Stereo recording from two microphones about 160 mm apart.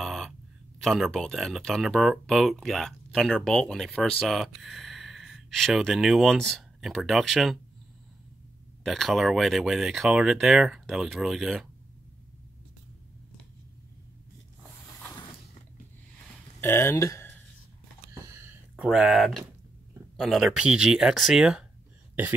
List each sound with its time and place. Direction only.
0.0 s a sound: centre (ahead or behind)
0.7 s speech: centre (ahead or behind)
8.8 s speech: centre (ahead or behind)
16.6 s speech: 15° left (ahead or behind)
18.2 s a sound: 15° right (ahead or behind)
18.9 s speech: centre (ahead or behind)